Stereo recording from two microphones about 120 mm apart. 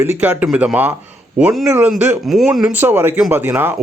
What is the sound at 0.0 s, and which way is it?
Speech, 10° right (ahead or behind).